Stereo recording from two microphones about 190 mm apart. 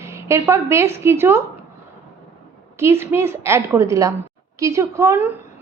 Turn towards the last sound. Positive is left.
turn(degrees=-10)  # may be behind; listen again after turning